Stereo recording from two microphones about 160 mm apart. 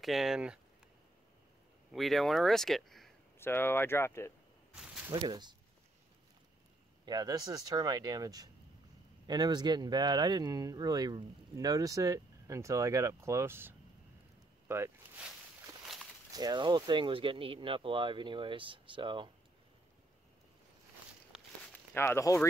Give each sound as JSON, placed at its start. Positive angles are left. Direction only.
{"t": 0.0, "sound": "speech", "side_deg": 0}
{"t": 1.9, "sound": "speech", "side_deg": 0}
{"t": 3.3, "sound": "speech", "side_deg": 15}
{"t": 5.1, "sound": "speech", "side_deg": -30}
{"t": 7.1, "sound": "speech", "side_deg": -25}
{"t": 16.3, "sound": "speech", "side_deg": -25}
{"t": 21.9, "sound": "speech", "side_deg": 15}